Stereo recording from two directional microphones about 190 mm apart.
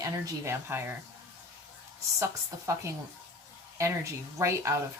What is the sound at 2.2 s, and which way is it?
Speech, 15° right (ahead or behind).